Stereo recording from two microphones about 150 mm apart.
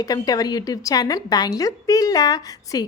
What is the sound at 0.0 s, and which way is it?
A woman's voice, 25° left (ahead or behind).